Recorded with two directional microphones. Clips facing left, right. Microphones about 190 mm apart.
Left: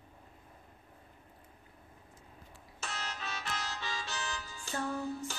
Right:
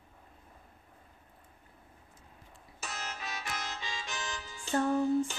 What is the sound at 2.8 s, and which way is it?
Music, 10° right (ahead or behind).